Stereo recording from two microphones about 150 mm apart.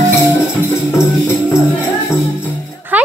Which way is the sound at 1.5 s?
15° left (ahead or behind).